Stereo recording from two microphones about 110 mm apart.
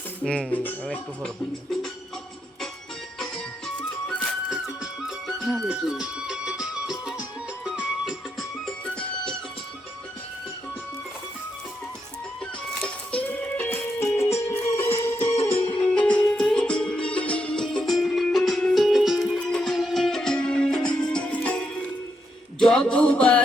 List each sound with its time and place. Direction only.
0.5 s speech: 15° left (ahead or behind)
3.2 s music: 10° left (ahead or behind)
4.4 s music: 5° right (ahead or behind)
9.0 s music: 10° left (ahead or behind)
12.7 s music: 10° left (ahead or behind)
22.6 s a sound: 5° left (ahead or behind)